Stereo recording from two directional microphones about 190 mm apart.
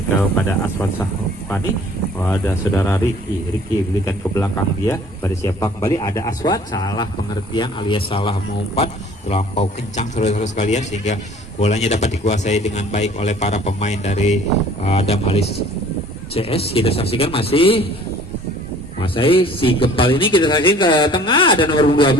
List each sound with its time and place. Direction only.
0.2 s a man's voice: 10° left (ahead or behind)
2.1 s a man's voice: 15° left (ahead or behind)
4.0 s a man's voice: 15° left (ahead or behind); by 17.8 s 30° left (ahead or behind)
19.0 s a man's voice: 30° left (ahead or behind)